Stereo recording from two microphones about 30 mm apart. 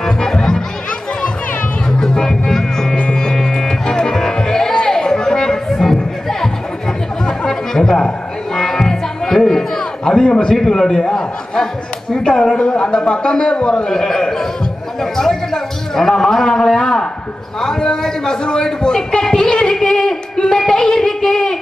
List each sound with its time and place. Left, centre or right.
0.0 s music: centre
1.9 s music: centre
4.8 s chatter: centre
5.7 s music: centre
7.2 s music: left
7.8 s a man's voice: centre
8.5 s music: centre
9.8 s a sound: left
10.5 s a man's voice: centre
12.5 s a man's voice: left
13.8 s a man's voice: centre
19.6 s a sound: centre